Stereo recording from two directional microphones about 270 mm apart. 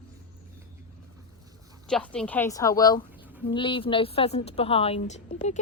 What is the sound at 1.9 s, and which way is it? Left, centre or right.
Speech, centre.